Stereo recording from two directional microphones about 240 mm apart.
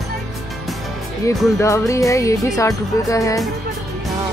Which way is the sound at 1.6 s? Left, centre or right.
Centre.